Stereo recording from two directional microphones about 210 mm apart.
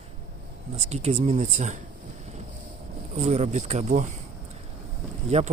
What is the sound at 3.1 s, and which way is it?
Speech, 30° right (ahead or behind).